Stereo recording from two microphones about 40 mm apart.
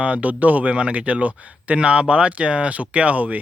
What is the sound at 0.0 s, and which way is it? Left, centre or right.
Speech, right.